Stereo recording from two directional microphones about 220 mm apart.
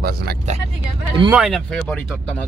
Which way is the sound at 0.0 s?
45° right (ahead or behind).